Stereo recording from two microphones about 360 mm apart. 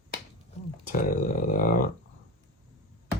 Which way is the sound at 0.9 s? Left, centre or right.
Left.